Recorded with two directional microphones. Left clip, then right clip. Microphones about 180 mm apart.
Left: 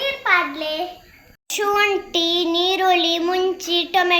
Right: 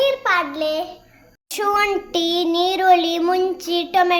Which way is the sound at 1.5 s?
65° right (ahead or behind).